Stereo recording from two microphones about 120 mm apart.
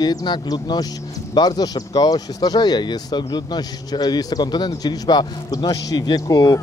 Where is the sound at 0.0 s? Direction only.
35° left (ahead or behind).